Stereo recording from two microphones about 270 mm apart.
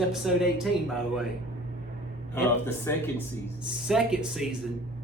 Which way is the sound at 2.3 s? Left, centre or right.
Centre.